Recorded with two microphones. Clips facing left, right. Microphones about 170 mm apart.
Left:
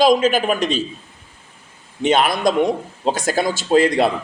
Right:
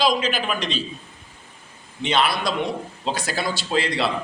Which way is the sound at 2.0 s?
45° left (ahead or behind).